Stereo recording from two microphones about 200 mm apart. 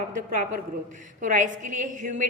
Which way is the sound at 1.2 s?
40° right (ahead or behind).